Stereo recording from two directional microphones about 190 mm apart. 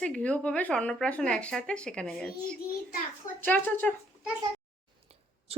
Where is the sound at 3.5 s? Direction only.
10° left (ahead or behind).